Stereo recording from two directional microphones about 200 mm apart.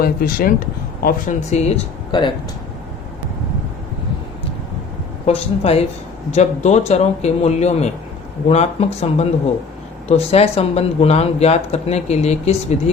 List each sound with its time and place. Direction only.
0.0 s speech: 50° left (ahead or behind); by 2.3 s 25° left (ahead or behind)
5.2 s speech: 30° left (ahead or behind)